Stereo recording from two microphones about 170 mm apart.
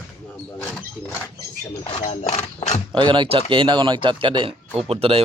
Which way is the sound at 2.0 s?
40° left (ahead or behind).